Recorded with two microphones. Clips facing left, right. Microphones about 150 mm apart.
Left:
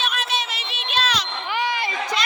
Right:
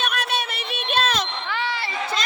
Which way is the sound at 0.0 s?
55° right (ahead or behind).